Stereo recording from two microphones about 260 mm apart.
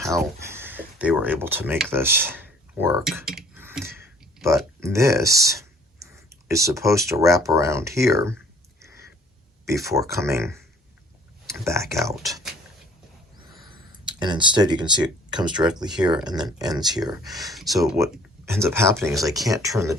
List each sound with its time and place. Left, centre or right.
0.3 s speech: centre
9.6 s speech: centre
14.0 s speech: centre
17.7 s speech: centre